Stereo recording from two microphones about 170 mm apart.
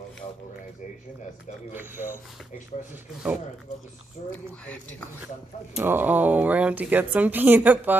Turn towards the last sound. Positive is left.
turn(degrees=-10)  # may be behind; listen again after turning